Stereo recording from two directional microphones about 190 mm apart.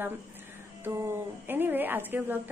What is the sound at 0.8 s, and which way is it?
A woman's voice, 10° right (ahead or behind).